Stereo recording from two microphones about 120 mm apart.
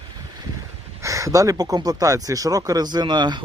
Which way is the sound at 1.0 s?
25° right (ahead or behind).